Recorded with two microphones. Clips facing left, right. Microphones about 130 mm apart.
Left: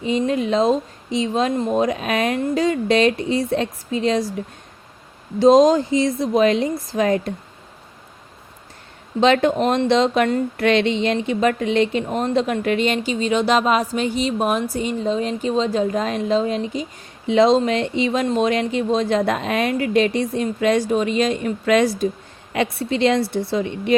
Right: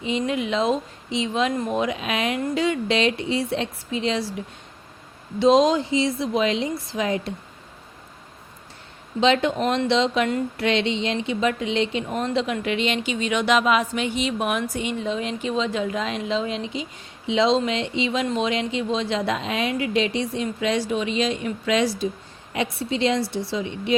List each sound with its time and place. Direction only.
0.0 s speech: 40° left (ahead or behind)
9.2 s a woman's voice: 50° left (ahead or behind)